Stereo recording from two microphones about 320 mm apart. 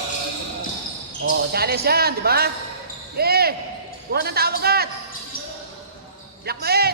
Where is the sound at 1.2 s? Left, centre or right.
Right.